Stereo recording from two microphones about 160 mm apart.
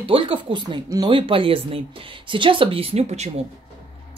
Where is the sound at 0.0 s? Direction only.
35° right (ahead or behind).